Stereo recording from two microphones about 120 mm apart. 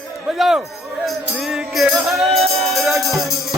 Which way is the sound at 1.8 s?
Centre (ahead or behind).